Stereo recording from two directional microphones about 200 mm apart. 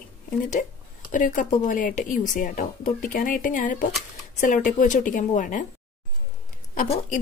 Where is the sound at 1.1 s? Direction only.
40° left (ahead or behind).